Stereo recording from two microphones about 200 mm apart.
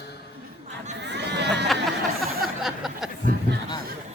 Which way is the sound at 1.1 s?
55° right (ahead or behind).